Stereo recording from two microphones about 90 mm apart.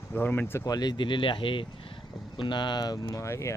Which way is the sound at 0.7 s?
50° left (ahead or behind).